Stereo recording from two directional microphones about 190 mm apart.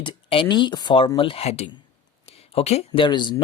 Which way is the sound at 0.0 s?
25° left (ahead or behind).